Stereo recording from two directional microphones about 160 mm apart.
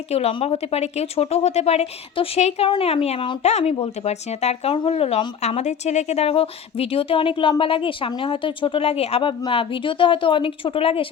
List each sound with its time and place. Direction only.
0.1 s speech: 40° left (ahead or behind)